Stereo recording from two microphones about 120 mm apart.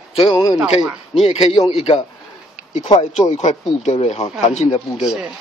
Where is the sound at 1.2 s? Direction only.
55° left (ahead or behind).